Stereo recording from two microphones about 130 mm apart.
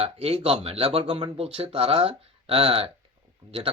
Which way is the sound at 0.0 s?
50° right (ahead or behind).